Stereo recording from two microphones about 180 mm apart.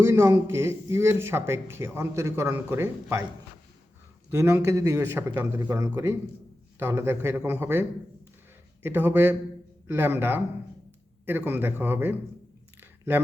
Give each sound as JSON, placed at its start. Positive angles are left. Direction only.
{"t": 0.0, "sound": "speech", "side_deg": -15}
{"t": 4.3, "sound": "speech", "side_deg": -15}
{"t": 12.8, "sound": "a sound", "side_deg": -10}